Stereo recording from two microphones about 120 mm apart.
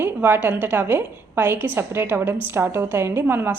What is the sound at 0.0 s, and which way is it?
A woman's voice, 15° right (ahead or behind).